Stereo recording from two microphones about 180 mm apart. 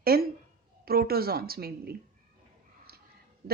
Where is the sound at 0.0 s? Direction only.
55° right (ahead or behind).